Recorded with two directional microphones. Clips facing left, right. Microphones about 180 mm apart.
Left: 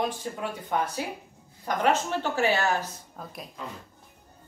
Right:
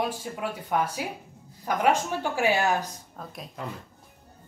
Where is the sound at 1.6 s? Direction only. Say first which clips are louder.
Right 1 dB; 10° right (ahead or behind).